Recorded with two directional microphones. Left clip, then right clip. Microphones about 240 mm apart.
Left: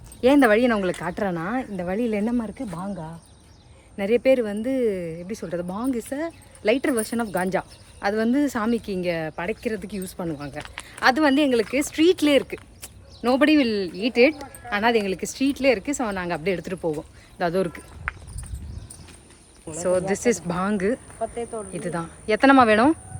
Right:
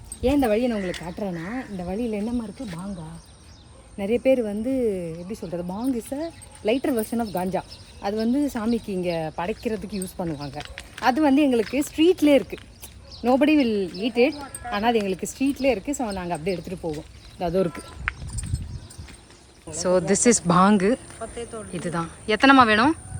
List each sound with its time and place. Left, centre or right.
0.2 s speech: centre
1.3 s speech: left
1.7 s speech: centre
3.9 s speech: centre
19.8 s speech: centre
21.2 s speech: left
21.7 s speech: centre